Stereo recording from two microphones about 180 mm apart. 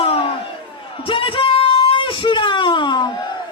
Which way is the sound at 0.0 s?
30° left (ahead or behind).